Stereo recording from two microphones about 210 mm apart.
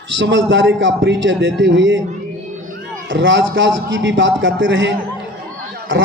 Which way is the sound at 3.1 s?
65° right (ahead or behind).